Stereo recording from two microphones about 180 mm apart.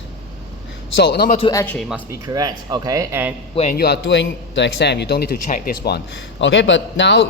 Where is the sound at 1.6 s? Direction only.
10° left (ahead or behind).